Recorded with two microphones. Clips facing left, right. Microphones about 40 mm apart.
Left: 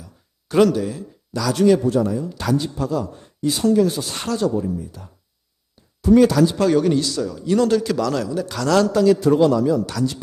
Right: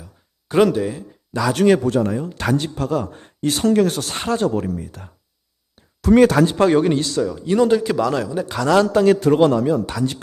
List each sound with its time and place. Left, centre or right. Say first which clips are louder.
0.0 s a sound: even; centre
1.5 s speech: even; right
4.5 s speech: even; right
6.1 s speech: right 2 dB; right
7.2 s speech: right 2 dB; right
9.0 s speech: right 1 dB; right